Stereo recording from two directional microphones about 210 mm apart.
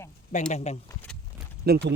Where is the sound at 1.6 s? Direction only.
50° right (ahead or behind).